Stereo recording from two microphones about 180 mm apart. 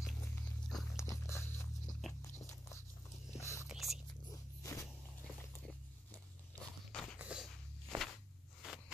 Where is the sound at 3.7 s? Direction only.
Centre (ahead or behind).